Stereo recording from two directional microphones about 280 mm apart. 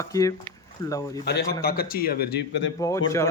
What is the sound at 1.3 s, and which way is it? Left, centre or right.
Speech, left.